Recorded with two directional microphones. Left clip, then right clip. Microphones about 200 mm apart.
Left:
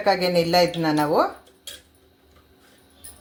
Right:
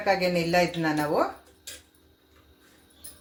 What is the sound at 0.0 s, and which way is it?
Speech, 40° left (ahead or behind).